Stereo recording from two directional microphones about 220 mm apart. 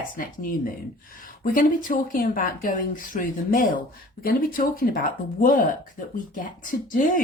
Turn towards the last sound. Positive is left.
turn(degrees=40)  # may be behind; listen again after turning